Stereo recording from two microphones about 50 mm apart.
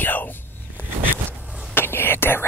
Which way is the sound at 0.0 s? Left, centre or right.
Left.